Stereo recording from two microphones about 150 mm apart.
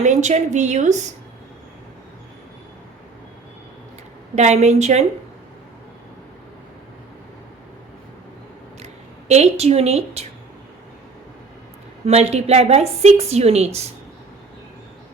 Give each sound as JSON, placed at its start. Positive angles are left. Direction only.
{"t": 0.0, "sound": "a woman's voice", "side_deg": -55}
{"t": 4.4, "sound": "a woman's voice", "side_deg": -50}
{"t": 8.8, "sound": "speech", "side_deg": -45}
{"t": 12.0, "sound": "a woman's voice", "side_deg": -45}